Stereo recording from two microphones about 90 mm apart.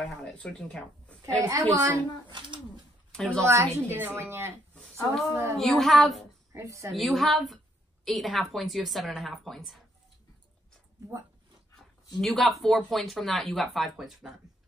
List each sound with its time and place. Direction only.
0.2 s speech: 10° left (ahead or behind)
1.2 s a woman's voice: 40° right (ahead or behind)
2.2 s speech: 60° right (ahead or behind)
3.1 s speech: 10° left (ahead or behind)
3.4 s a woman's voice: 30° right (ahead or behind)
4.7 s a sound: 5° left (ahead or behind)
5.3 s a woman's voice: 25° right (ahead or behind)
5.6 s a woman's voice: centre (ahead or behind)
6.5 s a woman's voice: 35° right (ahead or behind)
6.9 s a woman's voice: centre (ahead or behind)
12.2 s a woman's voice: 5° left (ahead or behind)